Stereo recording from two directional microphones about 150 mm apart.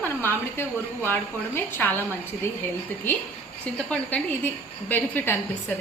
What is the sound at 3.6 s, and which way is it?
A woman's voice, 10° left (ahead or behind).